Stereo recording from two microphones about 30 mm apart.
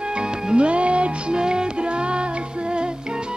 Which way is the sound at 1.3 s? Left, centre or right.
Right.